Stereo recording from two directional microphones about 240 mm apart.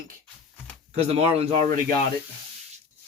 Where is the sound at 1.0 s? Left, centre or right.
Right.